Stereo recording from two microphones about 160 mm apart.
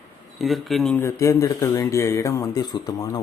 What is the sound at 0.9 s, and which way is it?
Speech, 20° left (ahead or behind).